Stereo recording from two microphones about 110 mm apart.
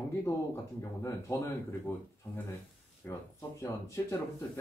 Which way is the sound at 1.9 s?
20° left (ahead or behind).